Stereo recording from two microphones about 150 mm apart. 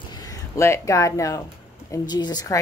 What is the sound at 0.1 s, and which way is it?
A woman's voice, 25° left (ahead or behind).